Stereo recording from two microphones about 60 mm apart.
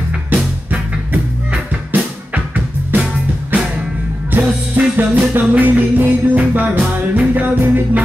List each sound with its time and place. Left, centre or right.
0.7 s music: right
4.3 s music: right